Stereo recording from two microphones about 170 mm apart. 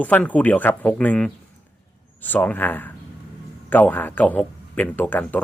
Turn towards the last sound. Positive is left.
turn(degrees=10)  # may be behind; listen again after turning